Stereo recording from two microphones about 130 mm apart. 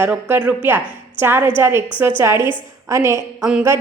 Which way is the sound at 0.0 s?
10° right (ahead or behind).